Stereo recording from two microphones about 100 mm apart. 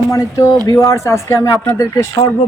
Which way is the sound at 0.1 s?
35° left (ahead or behind).